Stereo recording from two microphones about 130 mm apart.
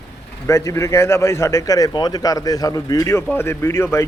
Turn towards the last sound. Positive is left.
turn(degrees=20)  # may be behind; listen again after turning